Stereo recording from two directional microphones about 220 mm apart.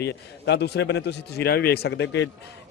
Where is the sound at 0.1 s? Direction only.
50° left (ahead or behind).